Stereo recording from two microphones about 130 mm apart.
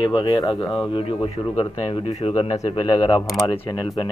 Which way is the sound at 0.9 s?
45° left (ahead or behind).